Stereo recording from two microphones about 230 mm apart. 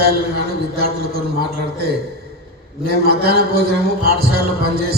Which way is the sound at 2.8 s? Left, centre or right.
Right.